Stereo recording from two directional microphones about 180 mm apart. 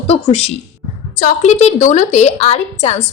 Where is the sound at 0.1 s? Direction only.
35° left (ahead or behind).